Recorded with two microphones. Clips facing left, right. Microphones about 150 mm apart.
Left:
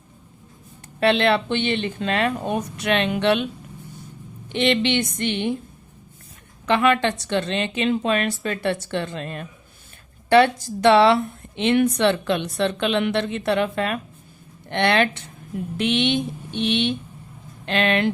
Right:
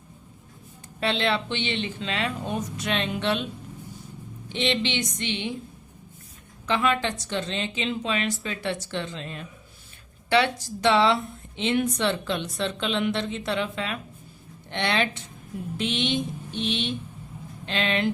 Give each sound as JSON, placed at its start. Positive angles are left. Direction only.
{"t": 0.9, "sound": "speech", "side_deg": 65}
{"t": 4.4, "sound": "speech", "side_deg": 60}
{"t": 6.7, "sound": "speech", "side_deg": 65}